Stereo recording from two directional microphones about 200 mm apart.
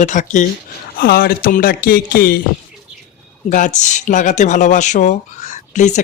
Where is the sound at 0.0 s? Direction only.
40° left (ahead or behind).